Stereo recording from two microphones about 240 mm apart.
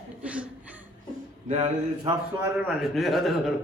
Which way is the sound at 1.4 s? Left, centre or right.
Right.